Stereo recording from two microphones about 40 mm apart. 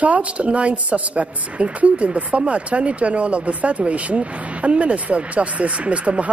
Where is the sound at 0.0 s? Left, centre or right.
Right.